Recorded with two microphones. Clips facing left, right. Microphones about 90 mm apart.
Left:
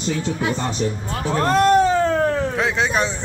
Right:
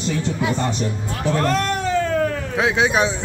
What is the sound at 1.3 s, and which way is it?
Cat, 25° left (ahead or behind).